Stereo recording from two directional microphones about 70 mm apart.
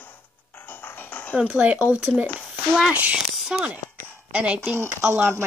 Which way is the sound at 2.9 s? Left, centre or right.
Right.